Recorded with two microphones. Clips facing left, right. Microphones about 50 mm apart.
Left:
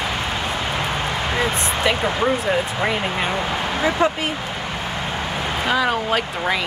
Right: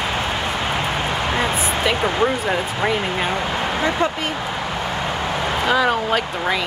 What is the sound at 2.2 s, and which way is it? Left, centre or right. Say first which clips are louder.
Speech: left 1 dB; centre.